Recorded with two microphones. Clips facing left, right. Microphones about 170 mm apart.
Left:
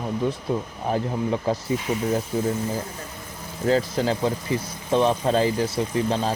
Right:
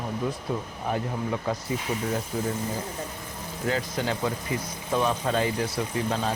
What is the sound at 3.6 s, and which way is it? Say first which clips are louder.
Speech: left 7 dB; 35° left (ahead or behind).